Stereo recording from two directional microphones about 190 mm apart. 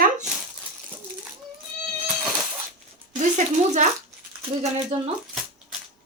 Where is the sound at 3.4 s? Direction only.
40° right (ahead or behind).